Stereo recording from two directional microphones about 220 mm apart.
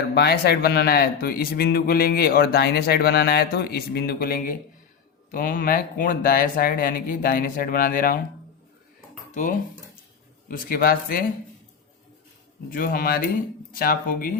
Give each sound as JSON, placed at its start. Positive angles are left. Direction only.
{"t": 0.1, "sound": "speech", "side_deg": 45}
{"t": 9.3, "sound": "speech", "side_deg": 35}
{"t": 12.7, "sound": "speech", "side_deg": 40}